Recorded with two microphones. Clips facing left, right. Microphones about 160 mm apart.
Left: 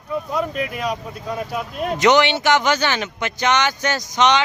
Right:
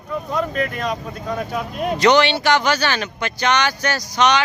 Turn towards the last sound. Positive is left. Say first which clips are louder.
# even
turn(degrees=20)  # may be behind; listen again after turning